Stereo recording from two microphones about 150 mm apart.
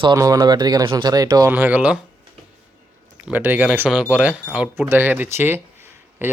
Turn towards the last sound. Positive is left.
turn(degrees=-15)  # may be behind; listen again after turning